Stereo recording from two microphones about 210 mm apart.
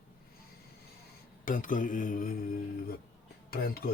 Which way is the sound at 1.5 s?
40° left (ahead or behind).